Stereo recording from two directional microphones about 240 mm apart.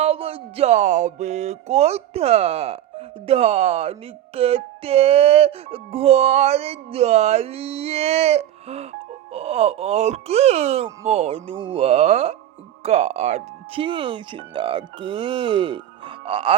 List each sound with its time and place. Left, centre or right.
0.0 s music: right